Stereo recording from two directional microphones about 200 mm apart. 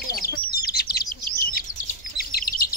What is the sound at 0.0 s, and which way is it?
Bird, 50° left (ahead or behind).